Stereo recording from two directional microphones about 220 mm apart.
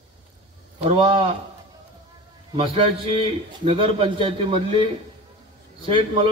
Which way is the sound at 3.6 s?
25° right (ahead or behind).